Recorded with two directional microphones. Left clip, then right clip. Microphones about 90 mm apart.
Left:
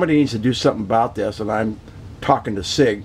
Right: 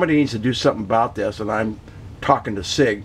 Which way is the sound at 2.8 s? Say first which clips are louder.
Left 1 dB; 35° left (ahead or behind).